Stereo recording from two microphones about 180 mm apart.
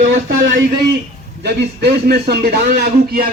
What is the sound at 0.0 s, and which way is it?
Speech, 50° right (ahead or behind).